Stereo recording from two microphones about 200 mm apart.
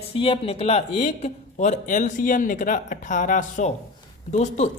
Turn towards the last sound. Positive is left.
turn(degrees=35)  # may be behind; listen again after turning